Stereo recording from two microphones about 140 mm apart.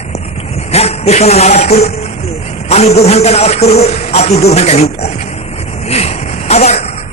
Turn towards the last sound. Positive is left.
turn(degrees=50)  # may be behind; listen again after turning